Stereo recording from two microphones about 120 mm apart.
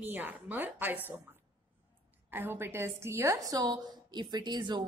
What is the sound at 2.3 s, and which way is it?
Speech, 20° right (ahead or behind).